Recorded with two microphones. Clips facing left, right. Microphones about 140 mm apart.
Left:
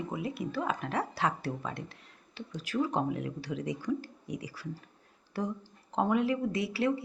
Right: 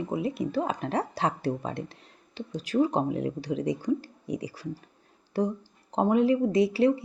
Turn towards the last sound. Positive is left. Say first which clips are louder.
# right 8 dB
turn(degrees=-20)  # may be behind; listen again after turning